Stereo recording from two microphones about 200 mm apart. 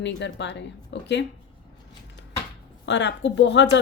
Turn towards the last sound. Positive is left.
turn(degrees=65)  # may be behind; listen again after turning